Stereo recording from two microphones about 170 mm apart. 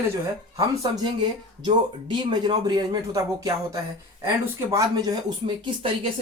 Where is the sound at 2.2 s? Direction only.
25° right (ahead or behind).